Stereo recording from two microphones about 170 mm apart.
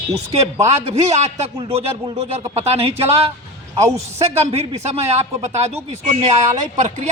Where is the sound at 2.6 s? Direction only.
35° right (ahead or behind).